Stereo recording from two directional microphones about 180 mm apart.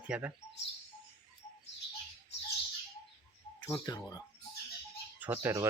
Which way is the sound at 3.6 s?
15° left (ahead or behind).